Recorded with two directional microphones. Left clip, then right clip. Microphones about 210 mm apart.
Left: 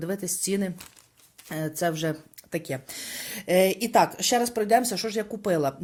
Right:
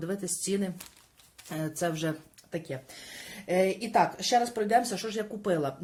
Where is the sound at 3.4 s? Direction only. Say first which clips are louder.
Left 5 dB; 40° left (ahead or behind).